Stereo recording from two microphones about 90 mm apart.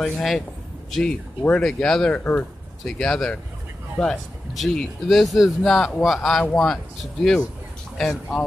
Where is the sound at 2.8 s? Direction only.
10° left (ahead or behind).